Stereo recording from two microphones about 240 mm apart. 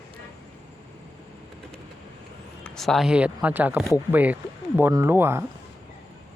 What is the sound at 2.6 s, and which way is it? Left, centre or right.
Speech, centre.